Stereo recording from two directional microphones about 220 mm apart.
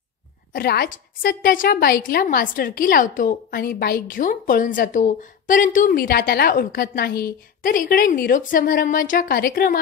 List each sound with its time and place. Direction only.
0.5 s a woman's voice: 45° left (ahead or behind)